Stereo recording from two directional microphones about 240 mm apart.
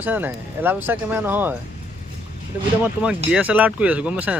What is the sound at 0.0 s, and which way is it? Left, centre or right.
Speech, centre.